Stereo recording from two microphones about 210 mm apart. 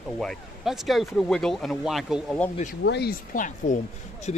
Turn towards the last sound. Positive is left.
turn(degrees=35)  # may be behind; listen again after turning